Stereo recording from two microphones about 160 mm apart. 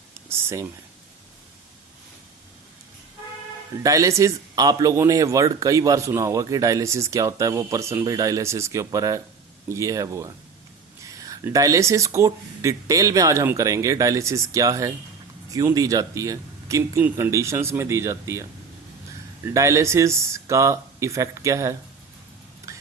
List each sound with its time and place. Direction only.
0.3 s speech: 15° right (ahead or behind)
3.8 s a man's voice: 20° right (ahead or behind)
19.5 s a man's voice: 20° right (ahead or behind)